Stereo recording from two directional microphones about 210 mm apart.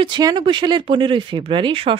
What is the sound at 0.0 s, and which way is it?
A woman's voice, 20° right (ahead or behind).